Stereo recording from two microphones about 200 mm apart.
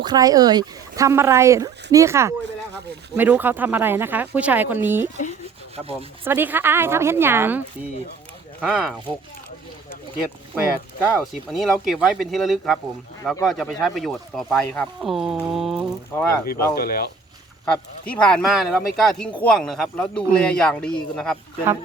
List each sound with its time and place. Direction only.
0.0 s speech: 20° right (ahead or behind)
6.2 s speech: 10° right (ahead or behind)
8.6 s speech: centre (ahead or behind)
11.0 s speech: 5° right (ahead or behind)
16.1 s speech: 10° left (ahead or behind)
16.7 s speech: 50° left (ahead or behind)
17.7 s speech: 5° left (ahead or behind)